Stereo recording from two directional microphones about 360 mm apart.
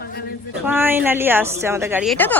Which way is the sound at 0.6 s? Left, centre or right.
Centre.